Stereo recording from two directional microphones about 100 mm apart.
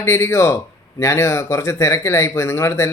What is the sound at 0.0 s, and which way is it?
A man's voice, 25° left (ahead or behind).